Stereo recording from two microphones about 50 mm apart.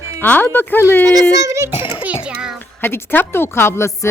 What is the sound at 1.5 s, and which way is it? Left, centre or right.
Speech, right.